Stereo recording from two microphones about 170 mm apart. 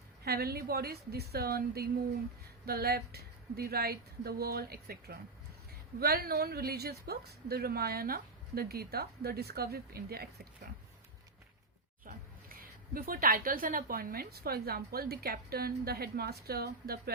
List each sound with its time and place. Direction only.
0.3 s a woman's voice: 65° right (ahead or behind)
12.0 s a woman's voice: 55° right (ahead or behind)